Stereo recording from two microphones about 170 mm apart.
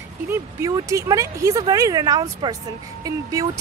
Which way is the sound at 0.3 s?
20° right (ahead or behind).